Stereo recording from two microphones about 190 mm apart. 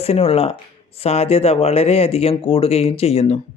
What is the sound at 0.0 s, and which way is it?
A man's voice, 35° left (ahead or behind).